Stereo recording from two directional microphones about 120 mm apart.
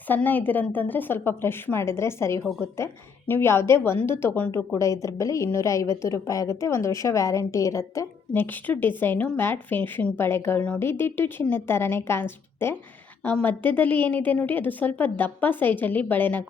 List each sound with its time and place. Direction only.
0.1 s a woman's voice: 15° left (ahead or behind)
4.8 s a woman's voice: 25° left (ahead or behind)
8.3 s a woman's voice: 15° left (ahead or behind)